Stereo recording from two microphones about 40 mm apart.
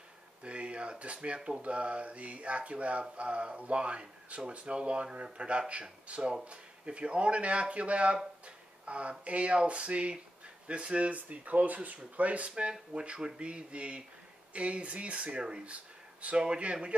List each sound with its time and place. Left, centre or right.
0.4 s speech: right
8.5 s a sound: right
9.2 s speech: right